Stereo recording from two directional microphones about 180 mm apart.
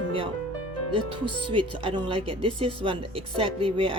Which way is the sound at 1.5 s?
30° right (ahead or behind).